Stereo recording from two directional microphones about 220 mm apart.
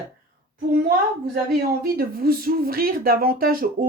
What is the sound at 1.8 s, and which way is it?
Speech, 40° right (ahead or behind).